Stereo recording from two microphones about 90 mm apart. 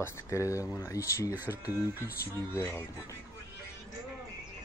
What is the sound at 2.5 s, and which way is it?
Speech, 25° left (ahead or behind).